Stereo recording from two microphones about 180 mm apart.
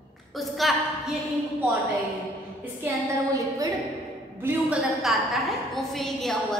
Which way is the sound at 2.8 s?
15° right (ahead or behind).